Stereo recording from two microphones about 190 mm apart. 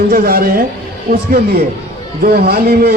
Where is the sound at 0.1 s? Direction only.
50° right (ahead or behind).